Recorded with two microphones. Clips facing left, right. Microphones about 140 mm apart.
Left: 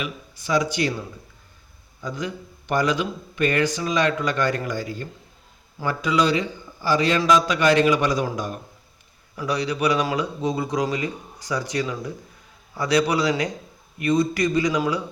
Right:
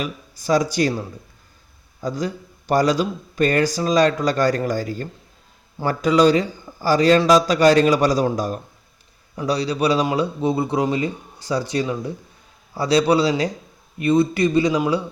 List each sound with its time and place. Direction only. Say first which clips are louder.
0.0 s a man's voice: right 4 dB; 40° right (ahead or behind)